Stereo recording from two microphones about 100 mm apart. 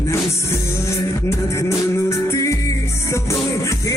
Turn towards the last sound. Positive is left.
turn(degrees=30)  # may be behind; listen again after turning